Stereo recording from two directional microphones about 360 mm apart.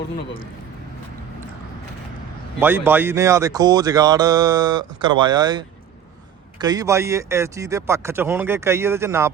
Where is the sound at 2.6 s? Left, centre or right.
Centre.